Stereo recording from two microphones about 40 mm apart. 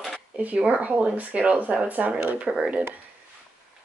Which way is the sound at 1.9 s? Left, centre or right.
Right.